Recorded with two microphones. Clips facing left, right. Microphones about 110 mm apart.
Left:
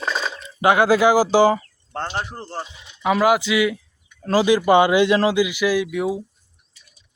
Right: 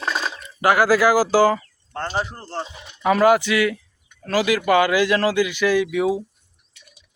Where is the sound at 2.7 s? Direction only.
55° right (ahead or behind).